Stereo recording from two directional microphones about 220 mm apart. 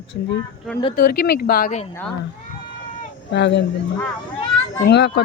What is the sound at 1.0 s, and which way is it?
Speech, 45° left (ahead or behind).